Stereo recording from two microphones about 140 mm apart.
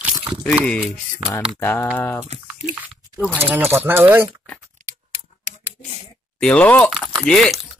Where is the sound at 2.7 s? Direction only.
10° right (ahead or behind).